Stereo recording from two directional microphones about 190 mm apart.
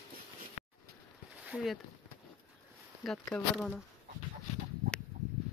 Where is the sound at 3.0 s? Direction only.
Centre (ahead or behind).